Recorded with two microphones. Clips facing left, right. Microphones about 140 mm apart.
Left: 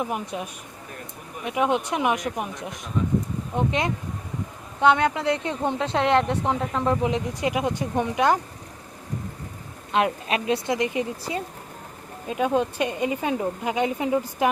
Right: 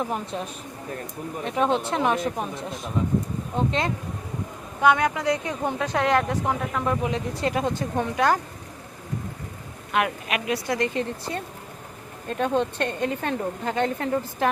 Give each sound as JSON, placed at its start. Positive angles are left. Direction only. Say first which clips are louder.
{"t": 0.0, "sound": "speech", "louder": "even", "side_deg": 10}
{"t": 1.5, "sound": "speech", "louder": "even", "side_deg": 10}
{"t": 9.9, "sound": "speech", "louder": "left 2 dB", "side_deg": 30}
{"t": 10.8, "sound": "speech", "louder": "even", "side_deg": 15}
{"t": 12.3, "sound": "speech", "louder": "left 1 dB", "side_deg": 5}